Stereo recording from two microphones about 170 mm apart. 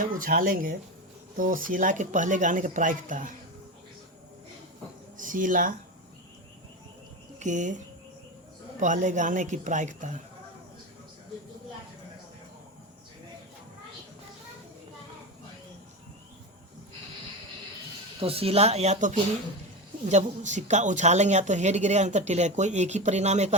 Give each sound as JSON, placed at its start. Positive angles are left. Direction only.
{"t": 0.0, "sound": "speech", "side_deg": -55}
{"t": 5.1, "sound": "speech", "side_deg": -50}
{"t": 7.3, "sound": "speech", "side_deg": -45}
{"t": 8.8, "sound": "speech", "side_deg": -50}
{"t": 18.2, "sound": "speech", "side_deg": -35}